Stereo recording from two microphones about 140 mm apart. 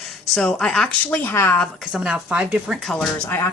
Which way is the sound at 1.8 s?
5° right (ahead or behind).